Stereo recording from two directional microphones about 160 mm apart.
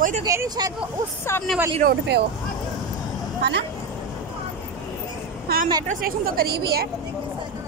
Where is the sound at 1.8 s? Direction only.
80° right.